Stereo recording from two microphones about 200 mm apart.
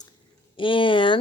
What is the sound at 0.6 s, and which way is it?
Speech, 25° left (ahead or behind).